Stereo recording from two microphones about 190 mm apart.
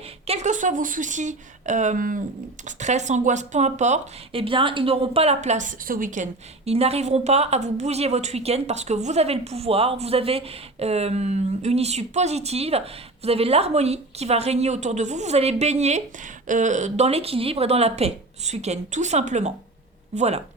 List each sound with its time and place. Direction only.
0.3 s a woman's voice: 40° right (ahead or behind)
6.7 s a woman's voice: 35° right (ahead or behind)